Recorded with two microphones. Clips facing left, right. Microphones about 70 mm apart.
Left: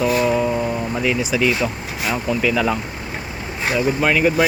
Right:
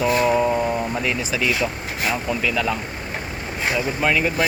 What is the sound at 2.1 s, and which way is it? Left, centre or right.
Speech, centre.